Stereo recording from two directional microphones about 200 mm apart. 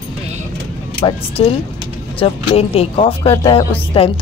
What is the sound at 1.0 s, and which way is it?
A woman's voice, 30° left (ahead or behind).